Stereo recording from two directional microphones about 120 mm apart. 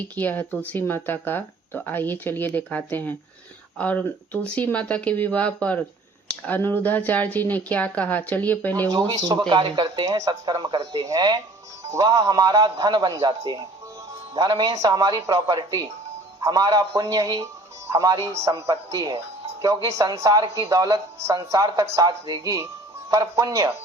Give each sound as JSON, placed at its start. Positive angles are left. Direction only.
{"t": 0.2, "sound": "speech", "side_deg": 15}
{"t": 9.1, "sound": "a man's voice", "side_deg": -35}